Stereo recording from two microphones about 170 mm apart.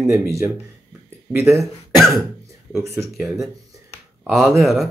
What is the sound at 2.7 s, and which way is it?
Speech, 15° right (ahead or behind).